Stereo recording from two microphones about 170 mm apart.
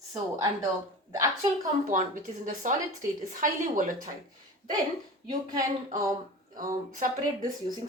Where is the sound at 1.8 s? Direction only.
50° right (ahead or behind).